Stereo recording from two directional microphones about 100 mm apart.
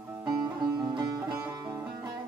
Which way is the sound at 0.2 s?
45° right (ahead or behind).